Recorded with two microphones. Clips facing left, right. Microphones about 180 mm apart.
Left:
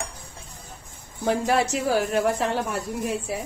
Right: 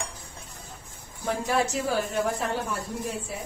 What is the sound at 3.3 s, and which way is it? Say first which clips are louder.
Speech: left 6 dB; 75° left (ahead or behind).